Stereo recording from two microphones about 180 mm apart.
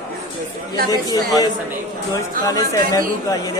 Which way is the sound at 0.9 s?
20° left (ahead or behind).